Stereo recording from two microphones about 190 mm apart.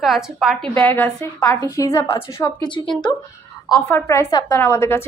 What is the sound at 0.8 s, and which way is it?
A woman's voice, 10° left (ahead or behind).